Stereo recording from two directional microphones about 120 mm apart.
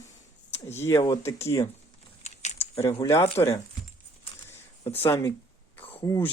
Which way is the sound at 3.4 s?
25° left (ahead or behind).